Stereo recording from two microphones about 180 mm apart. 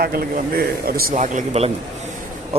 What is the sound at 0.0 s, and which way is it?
Speech, 55° right (ahead or behind).